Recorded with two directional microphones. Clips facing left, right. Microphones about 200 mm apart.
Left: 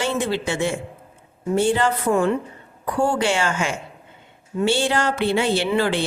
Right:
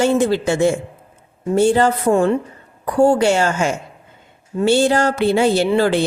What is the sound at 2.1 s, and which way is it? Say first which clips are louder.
A woman's voice: right 4 dB; 30° right (ahead or behind).